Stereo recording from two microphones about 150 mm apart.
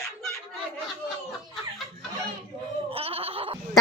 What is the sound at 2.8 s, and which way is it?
Goat, 40° right (ahead or behind).